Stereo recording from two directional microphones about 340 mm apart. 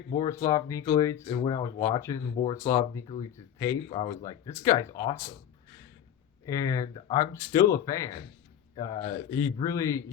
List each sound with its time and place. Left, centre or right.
0.1 s speech: centre
2.3 s speech: left
2.6 s speech: centre
6.4 s speech: centre